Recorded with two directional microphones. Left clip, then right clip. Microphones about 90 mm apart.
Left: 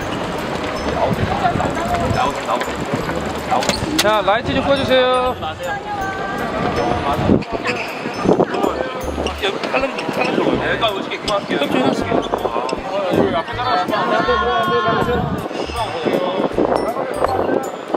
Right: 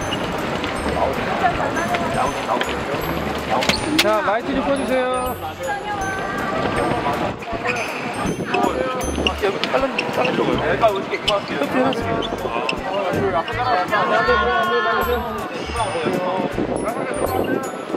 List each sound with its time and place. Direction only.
3.6 s a sound: 25° left (ahead or behind)
4.8 s speech: 40° left (ahead or behind)
13.7 s speech: 15° left (ahead or behind)